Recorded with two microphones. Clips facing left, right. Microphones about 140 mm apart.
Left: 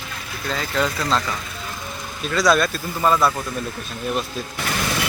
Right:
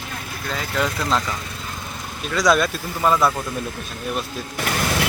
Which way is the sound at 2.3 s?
5° left (ahead or behind).